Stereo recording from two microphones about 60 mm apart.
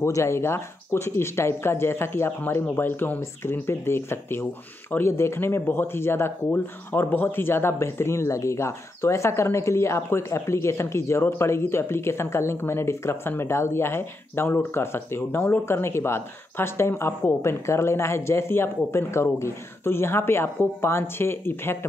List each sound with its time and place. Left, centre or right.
0.0 s speech: left